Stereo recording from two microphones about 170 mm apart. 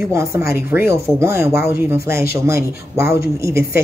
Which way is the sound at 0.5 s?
15° right (ahead or behind).